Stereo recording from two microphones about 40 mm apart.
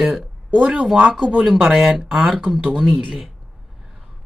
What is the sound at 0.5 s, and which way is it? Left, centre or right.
Speech, right.